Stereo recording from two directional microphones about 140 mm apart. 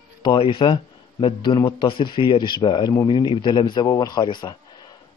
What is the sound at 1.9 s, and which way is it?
Speech, 35° left (ahead or behind).